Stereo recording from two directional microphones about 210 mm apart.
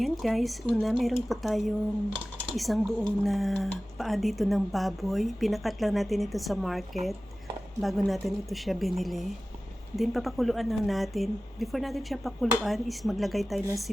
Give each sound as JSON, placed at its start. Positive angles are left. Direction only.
{"t": 0.0, "sound": "speech", "side_deg": 0}